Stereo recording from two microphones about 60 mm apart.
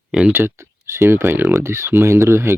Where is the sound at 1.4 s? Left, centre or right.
Right.